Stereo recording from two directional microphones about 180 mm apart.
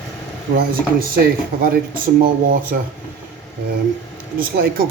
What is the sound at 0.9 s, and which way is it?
Speech, 55° right (ahead or behind).